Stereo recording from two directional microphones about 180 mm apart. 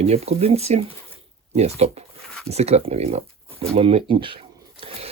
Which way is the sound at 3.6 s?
35° right (ahead or behind).